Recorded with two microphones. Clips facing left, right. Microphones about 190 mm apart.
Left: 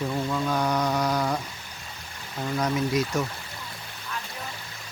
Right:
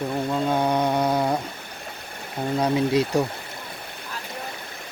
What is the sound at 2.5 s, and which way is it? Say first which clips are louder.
Speech: right 4 dB; 30° right (ahead or behind).